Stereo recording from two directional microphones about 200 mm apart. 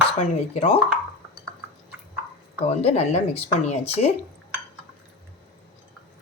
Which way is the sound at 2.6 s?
30° left (ahead or behind).